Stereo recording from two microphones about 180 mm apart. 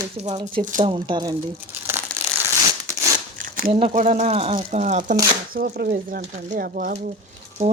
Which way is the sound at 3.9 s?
45° right (ahead or behind).